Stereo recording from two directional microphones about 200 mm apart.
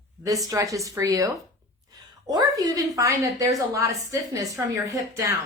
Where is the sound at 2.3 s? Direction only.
20° right (ahead or behind).